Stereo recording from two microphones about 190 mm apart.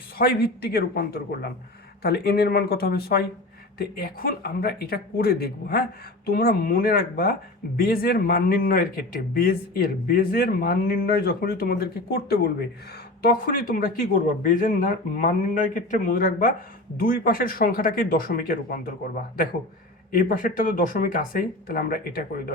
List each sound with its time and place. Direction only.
0.2 s speech: 50° left (ahead or behind)
20.1 s speech: 50° left (ahead or behind)